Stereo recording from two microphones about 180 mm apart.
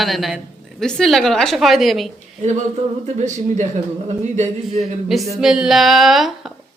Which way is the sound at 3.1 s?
40° right (ahead or behind).